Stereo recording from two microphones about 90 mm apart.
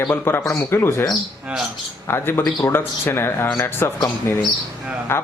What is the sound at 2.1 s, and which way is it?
Speech, 25° left (ahead or behind).